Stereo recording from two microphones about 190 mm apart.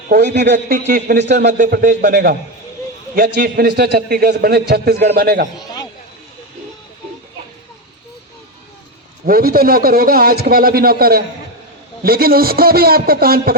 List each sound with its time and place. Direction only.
0.1 s a man's voice: 65° right (ahead or behind)
0.9 s a man's voice: 50° right (ahead or behind)
1.5 s a man's voice: 45° right (ahead or behind)
9.2 s a man's voice: 50° right (ahead or behind)